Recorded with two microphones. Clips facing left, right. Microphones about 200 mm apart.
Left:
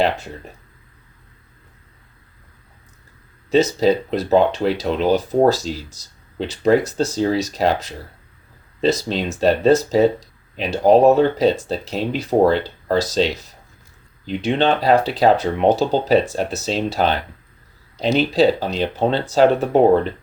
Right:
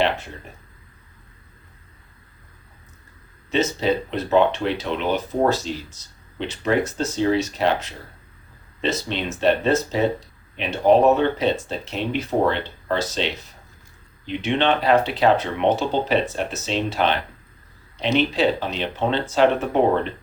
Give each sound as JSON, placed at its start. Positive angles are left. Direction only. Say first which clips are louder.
{"t": 3.5, "sound": "speech", "louder": "left 6 dB", "side_deg": 40}